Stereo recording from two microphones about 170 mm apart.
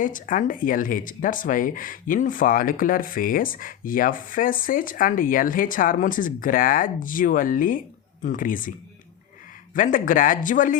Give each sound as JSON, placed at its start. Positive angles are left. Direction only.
{"t": 0.0, "sound": "speech", "side_deg": 50}
{"t": 9.7, "sound": "speech", "side_deg": 50}